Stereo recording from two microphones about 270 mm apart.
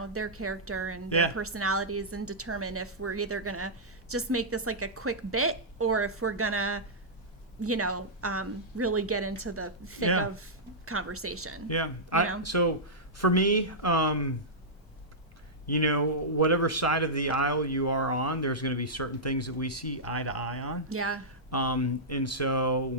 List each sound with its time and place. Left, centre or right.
0.0 s a woman's voice: right
11.7 s a man's voice: left
15.6 s speech: left
20.9 s a woman's voice: right
21.5 s speech: left